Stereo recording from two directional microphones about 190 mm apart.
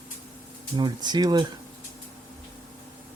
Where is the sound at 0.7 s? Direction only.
20° right (ahead or behind).